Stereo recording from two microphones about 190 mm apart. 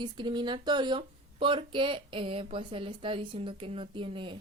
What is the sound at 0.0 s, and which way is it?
Speech, 25° right (ahead or behind).